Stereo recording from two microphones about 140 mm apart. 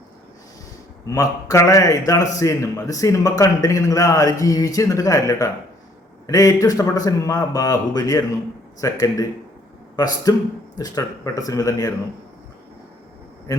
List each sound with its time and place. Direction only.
1.1 s a man's voice: 25° left (ahead or behind)